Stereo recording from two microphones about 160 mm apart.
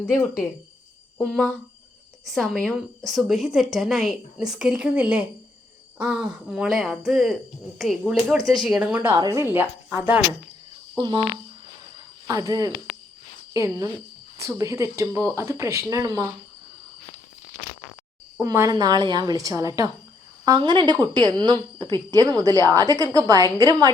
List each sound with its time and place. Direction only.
0.0 s speech: 20° left (ahead or behind)
1.2 s a woman's voice: 5° left (ahead or behind)
9.1 s speech: 25° right (ahead or behind)
9.5 s a woman's voice: 15° right (ahead or behind)
10.9 s speech: 30° right (ahead or behind)
12.3 s speech: 20° right (ahead or behind)
18.4 s speech: 20° right (ahead or behind)